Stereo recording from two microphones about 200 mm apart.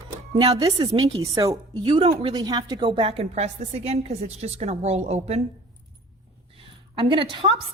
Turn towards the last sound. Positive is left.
turn(degrees=-25)  # may be behind; listen again after turning